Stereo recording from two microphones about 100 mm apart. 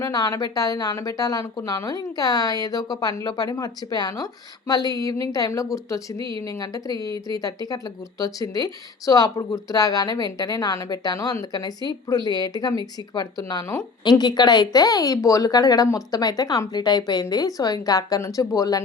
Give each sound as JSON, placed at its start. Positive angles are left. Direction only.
{"t": 0.0, "sound": "speech", "side_deg": 35}
{"t": 4.1, "sound": "speech", "side_deg": 30}